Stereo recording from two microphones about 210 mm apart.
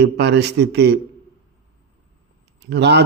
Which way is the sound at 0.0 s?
55° right (ahead or behind).